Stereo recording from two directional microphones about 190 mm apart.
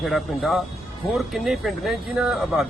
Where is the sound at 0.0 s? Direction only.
Centre (ahead or behind).